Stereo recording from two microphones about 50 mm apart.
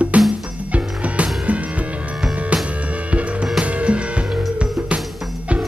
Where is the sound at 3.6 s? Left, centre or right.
Right.